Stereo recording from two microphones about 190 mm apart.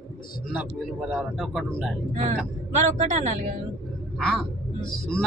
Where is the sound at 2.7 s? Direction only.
40° right (ahead or behind).